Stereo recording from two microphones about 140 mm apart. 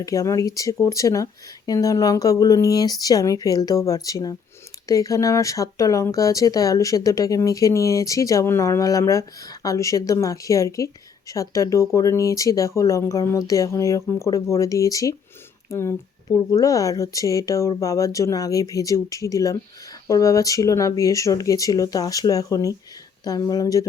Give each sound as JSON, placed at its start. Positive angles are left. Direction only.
{"t": 0.0, "sound": "speech", "side_deg": 25}